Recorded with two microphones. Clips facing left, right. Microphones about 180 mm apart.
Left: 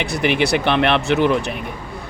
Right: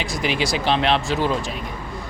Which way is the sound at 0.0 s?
65° left (ahead or behind).